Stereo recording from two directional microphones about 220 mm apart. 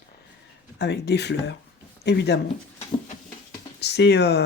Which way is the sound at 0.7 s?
50° left (ahead or behind).